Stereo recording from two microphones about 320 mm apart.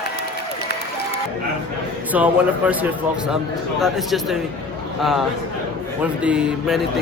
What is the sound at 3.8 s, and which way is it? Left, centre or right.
A man's voice, centre.